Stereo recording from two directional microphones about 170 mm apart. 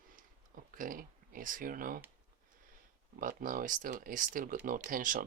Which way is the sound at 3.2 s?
55° right (ahead or behind).